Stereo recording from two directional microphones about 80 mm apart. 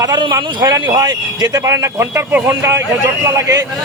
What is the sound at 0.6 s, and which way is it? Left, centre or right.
A man's voice, right.